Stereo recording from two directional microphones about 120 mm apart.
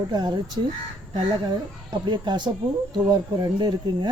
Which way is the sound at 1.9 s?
40° right (ahead or behind).